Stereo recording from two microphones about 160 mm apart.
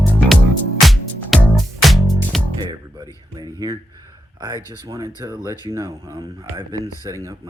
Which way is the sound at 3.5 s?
20° right (ahead or behind).